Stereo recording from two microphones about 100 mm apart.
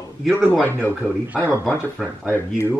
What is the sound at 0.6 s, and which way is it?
Speech, 15° right (ahead or behind).